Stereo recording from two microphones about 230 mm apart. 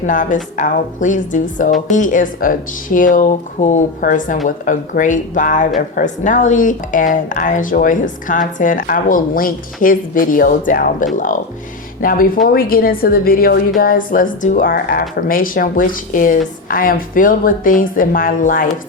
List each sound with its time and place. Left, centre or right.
0.0 s speech: left